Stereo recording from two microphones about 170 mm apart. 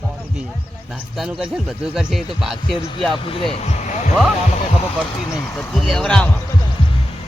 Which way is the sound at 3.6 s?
45° left (ahead or behind).